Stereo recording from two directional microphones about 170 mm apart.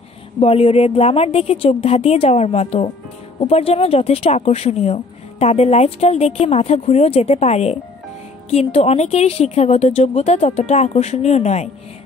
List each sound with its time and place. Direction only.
0.4 s a woman's voice: 35° left (ahead or behind)